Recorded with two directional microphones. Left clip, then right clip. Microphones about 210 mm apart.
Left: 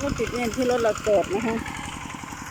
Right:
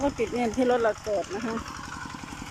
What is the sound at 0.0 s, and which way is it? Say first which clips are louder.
Speech: even; 50° left (ahead or behind).